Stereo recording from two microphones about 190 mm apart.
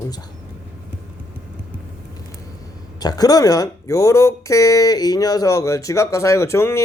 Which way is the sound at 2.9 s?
20° left (ahead or behind).